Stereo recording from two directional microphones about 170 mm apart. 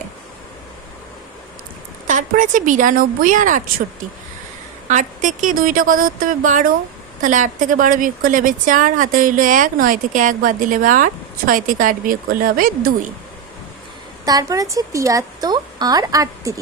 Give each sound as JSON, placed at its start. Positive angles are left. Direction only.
{"t": 2.0, "sound": "a woman's voice", "side_deg": -50}
{"t": 4.9, "sound": "a woman's voice", "side_deg": -45}
{"t": 14.3, "sound": "speech", "side_deg": -20}